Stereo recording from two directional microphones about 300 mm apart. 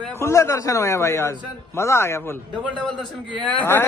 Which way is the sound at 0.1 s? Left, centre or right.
Centre.